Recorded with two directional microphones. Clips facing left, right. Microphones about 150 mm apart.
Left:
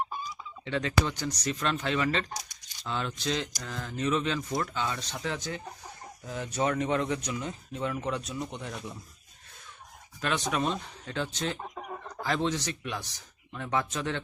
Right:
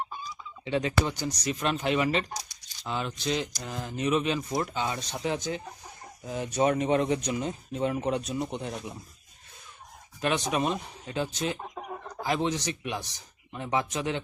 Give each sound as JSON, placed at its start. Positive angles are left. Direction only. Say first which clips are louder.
{"t": 0.6, "sound": "speech", "louder": "right 2 dB", "side_deg": -15}
{"t": 10.2, "sound": "speech", "louder": "right 2 dB", "side_deg": -20}